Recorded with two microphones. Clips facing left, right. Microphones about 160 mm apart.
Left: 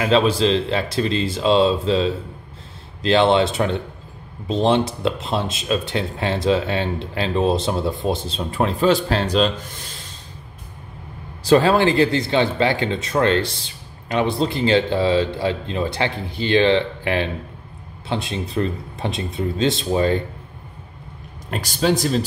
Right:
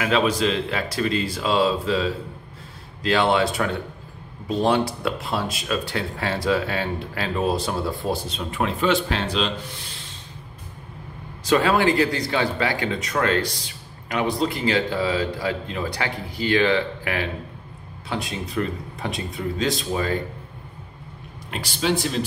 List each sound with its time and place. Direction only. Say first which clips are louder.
0.0 s speech: left 4 dB; 30° left (ahead or behind)
11.4 s speech: left 4 dB; 30° left (ahead or behind)
21.5 s a man's voice: left 4 dB; 45° left (ahead or behind)